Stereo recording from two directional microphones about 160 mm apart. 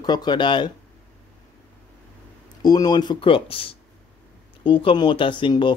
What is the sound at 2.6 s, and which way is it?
Speech, 25° left (ahead or behind).